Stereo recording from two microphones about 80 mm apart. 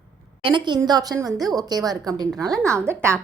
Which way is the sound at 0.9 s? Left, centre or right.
Right.